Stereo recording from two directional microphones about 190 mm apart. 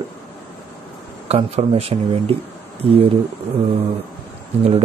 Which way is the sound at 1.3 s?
35° right (ahead or behind).